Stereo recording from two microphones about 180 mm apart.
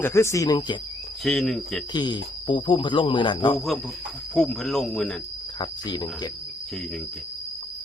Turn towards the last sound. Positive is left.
turn(degrees=25)  # may be behind; listen again after turning